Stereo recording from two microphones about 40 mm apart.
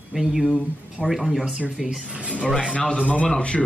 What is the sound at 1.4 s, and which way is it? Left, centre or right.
Speech, right.